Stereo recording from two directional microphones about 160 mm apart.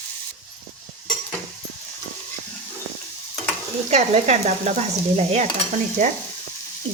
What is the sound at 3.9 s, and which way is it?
Speech, 45° right (ahead or behind).